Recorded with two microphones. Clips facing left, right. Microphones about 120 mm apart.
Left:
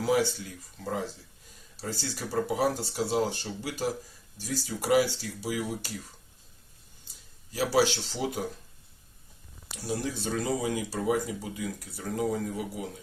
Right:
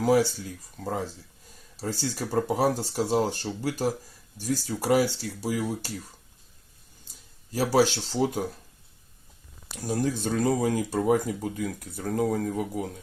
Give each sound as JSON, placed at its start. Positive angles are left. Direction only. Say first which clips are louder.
{"t": 0.9, "sound": "speech", "louder": "right 2 dB", "side_deg": -40}
{"t": 7.5, "sound": "speech", "louder": "right 3 dB", "side_deg": -45}
{"t": 9.7, "sound": "speech", "louder": "right 5 dB", "side_deg": -45}